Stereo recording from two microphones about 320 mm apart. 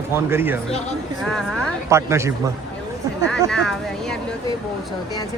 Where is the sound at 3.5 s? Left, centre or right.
Centre.